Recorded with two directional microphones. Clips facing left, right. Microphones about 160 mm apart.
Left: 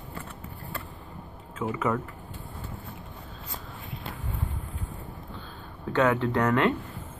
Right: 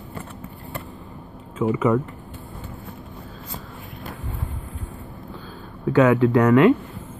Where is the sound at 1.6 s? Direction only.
15° right (ahead or behind).